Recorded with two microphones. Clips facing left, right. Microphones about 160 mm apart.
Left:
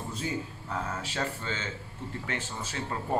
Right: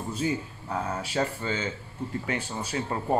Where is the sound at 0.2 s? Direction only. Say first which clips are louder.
Right 3 dB; 10° right (ahead or behind).